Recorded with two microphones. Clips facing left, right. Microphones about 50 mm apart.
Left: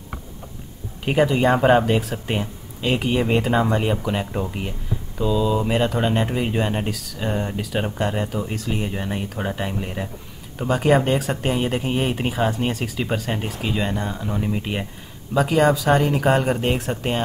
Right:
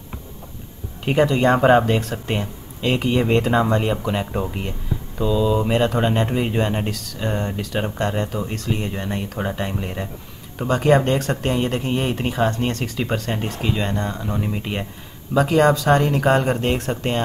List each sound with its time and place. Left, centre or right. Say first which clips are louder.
1.0 s speech: right 1 dB; centre